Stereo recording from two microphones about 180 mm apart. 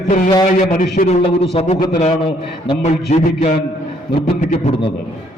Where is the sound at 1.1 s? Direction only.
35° left (ahead or behind).